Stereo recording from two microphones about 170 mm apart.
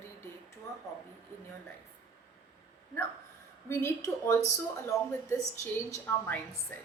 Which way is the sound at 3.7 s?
15° left (ahead or behind).